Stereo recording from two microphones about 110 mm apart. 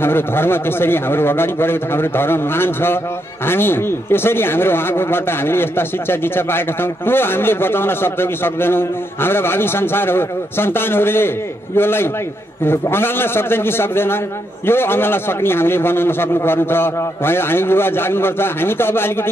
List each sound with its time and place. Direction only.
0.0 s speech: 20° left (ahead or behind)